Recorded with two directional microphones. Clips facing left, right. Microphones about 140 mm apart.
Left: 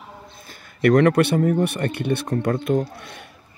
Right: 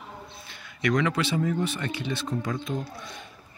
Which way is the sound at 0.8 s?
60° left (ahead or behind).